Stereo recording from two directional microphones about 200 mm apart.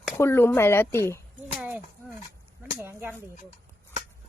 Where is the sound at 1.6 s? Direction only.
5° right (ahead or behind).